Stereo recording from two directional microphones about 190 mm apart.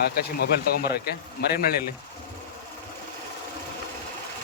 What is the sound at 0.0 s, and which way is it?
A man's voice, 55° left (ahead or behind).